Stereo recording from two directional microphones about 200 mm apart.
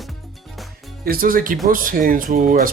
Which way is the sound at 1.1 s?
45° right (ahead or behind).